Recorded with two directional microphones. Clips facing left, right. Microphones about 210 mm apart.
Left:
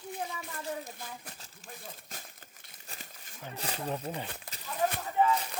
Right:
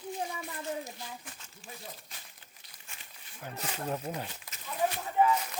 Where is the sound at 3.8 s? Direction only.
5° right (ahead or behind).